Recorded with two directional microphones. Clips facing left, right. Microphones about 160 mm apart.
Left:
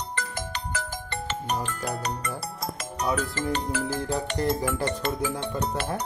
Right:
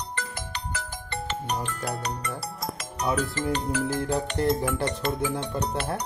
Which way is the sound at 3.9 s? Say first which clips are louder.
Right 1 dB; 5° left (ahead or behind).